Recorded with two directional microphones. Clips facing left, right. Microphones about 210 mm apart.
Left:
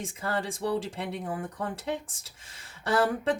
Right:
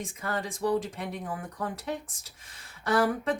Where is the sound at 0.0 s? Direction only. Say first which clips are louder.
Left 2 dB; 30° left (ahead or behind).